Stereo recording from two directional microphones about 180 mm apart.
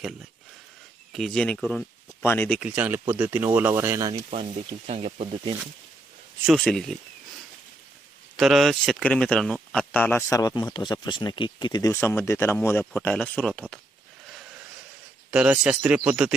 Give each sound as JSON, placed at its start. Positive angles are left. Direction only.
{"t": 1.1, "sound": "speech", "side_deg": 0}
{"t": 2.6, "sound": "speech", "side_deg": -10}
{"t": 4.1, "sound": "speech", "side_deg": -35}
{"t": 6.4, "sound": "speech", "side_deg": 0}
{"t": 8.4, "sound": "speech", "side_deg": 0}
{"t": 15.3, "sound": "speech", "side_deg": -5}